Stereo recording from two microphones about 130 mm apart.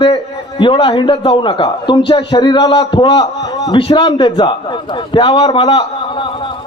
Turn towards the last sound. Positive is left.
turn(degrees=40)  # may be behind; listen again after turning